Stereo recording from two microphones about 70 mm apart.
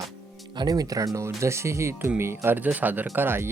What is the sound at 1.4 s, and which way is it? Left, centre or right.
Speech, right.